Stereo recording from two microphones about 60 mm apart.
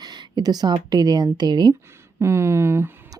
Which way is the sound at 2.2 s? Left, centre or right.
Right.